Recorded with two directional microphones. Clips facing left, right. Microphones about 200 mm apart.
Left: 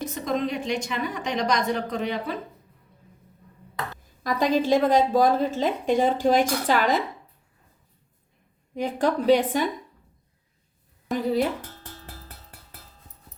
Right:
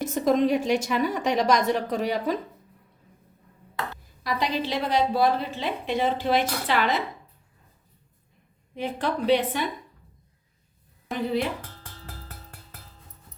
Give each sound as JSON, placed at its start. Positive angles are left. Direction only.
{"t": 0.0, "sound": "a sound", "side_deg": -45}
{"t": 0.6, "sound": "a woman's voice", "side_deg": -10}
{"t": 0.9, "sound": "speech", "side_deg": -40}
{"t": 4.2, "sound": "a woman's voice", "side_deg": 45}
{"t": 8.7, "sound": "a woman's voice", "side_deg": 40}
{"t": 11.1, "sound": "a woman's voice", "side_deg": 40}